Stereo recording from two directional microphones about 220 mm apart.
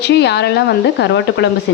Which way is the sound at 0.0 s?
50° left (ahead or behind).